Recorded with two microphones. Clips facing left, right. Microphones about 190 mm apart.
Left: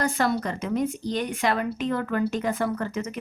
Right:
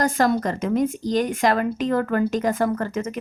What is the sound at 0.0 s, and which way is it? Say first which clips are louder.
Speech: right 4 dB; 45° right (ahead or behind).